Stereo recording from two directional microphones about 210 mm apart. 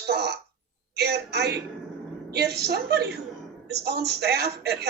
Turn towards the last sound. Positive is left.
turn(degrees=-50)  # may be behind; listen again after turning